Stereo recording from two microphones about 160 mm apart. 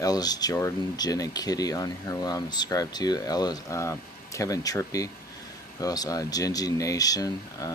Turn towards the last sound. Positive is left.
turn(degrees=20)  # may be behind; listen again after turning